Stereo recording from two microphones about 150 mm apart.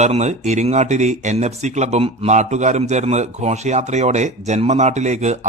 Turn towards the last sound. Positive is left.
turn(degrees=-50)  # may be behind; listen again after turning